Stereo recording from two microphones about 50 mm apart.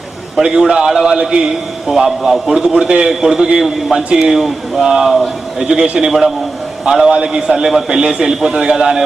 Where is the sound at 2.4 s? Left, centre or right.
Centre.